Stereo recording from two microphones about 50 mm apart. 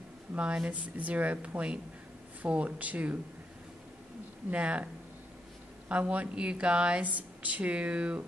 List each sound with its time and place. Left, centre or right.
0.3 s speech: right
4.5 s speech: right
5.9 s speech: right